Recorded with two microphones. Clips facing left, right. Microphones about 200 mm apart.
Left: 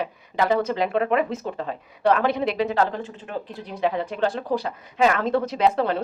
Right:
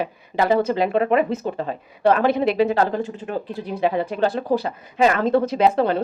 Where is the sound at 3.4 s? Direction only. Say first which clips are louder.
Right 2 dB; 5° right (ahead or behind).